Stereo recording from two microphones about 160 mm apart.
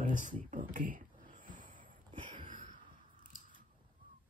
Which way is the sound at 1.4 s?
55° right (ahead or behind).